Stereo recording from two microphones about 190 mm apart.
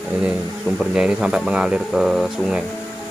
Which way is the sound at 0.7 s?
5° right (ahead or behind).